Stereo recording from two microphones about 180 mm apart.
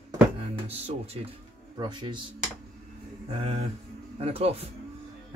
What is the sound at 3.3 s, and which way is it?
A man's voice, 30° right (ahead or behind).